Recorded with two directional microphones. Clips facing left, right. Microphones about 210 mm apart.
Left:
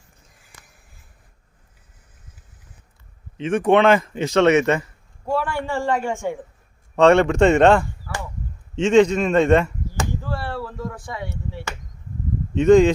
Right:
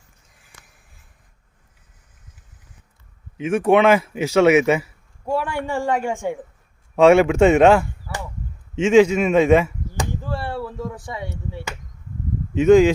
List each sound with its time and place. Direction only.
3.3 s speech: 10° right (ahead or behind)
10.0 s a sound: 20° right (ahead or behind)
12.5 s speech: 5° right (ahead or behind)